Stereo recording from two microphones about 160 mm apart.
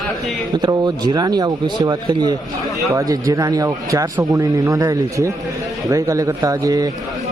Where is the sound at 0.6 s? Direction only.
25° right (ahead or behind).